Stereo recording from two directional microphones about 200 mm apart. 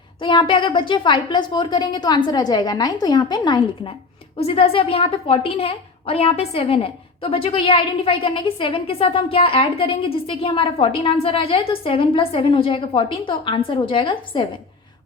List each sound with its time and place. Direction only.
0.2 s a woman's voice: 25° left (ahead or behind)